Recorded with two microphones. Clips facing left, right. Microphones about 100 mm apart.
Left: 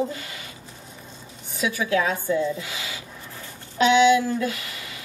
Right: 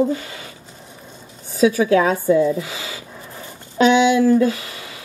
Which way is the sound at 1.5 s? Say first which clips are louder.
Right 9 dB; 35° right (ahead or behind).